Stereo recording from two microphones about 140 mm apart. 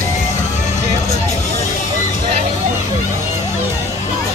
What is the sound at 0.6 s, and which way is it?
Music, 55° left (ahead or behind).